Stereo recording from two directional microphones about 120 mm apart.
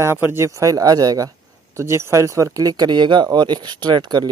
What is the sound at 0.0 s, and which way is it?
A man's voice, 20° right (ahead or behind).